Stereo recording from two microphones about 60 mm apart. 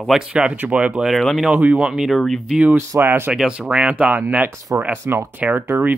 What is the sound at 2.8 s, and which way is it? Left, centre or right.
Speech, right.